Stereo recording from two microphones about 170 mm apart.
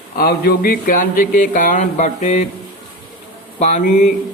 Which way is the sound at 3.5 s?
45° left (ahead or behind).